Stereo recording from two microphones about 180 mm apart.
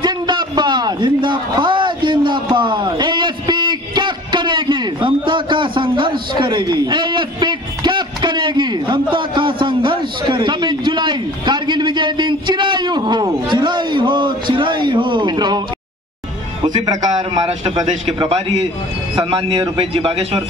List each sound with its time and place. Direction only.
0.0 s a sound: 25° right (ahead or behind)
16.6 s a man's voice: 20° right (ahead or behind)
18.0 s a man's voice: 35° right (ahead or behind)